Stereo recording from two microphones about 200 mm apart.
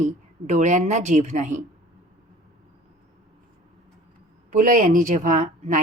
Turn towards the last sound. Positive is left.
turn(degrees=-40)  # may be behind; listen again after turning